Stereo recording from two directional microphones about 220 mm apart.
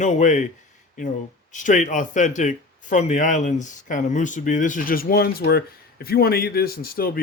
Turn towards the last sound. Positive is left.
turn(degrees=45)  # may be behind; listen again after turning